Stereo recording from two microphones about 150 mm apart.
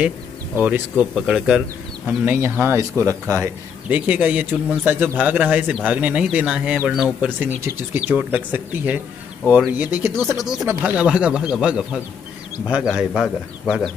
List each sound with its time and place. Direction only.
0.6 s speech: 15° right (ahead or behind)
10.3 s speech: 5° right (ahead or behind)